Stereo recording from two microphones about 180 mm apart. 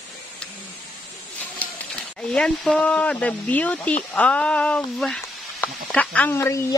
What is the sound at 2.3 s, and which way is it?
Speech, 5° left (ahead or behind).